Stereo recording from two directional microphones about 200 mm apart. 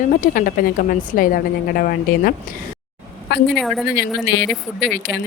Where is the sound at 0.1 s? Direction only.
45° left (ahead or behind).